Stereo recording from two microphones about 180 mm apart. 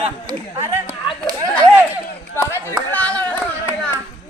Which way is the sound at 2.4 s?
15° left (ahead or behind).